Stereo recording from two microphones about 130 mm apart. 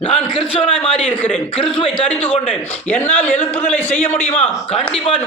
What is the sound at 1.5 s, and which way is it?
Speech, 45° left (ahead or behind).